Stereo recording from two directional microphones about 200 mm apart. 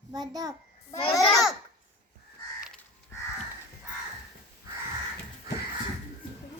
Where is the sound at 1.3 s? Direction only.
Centre (ahead or behind).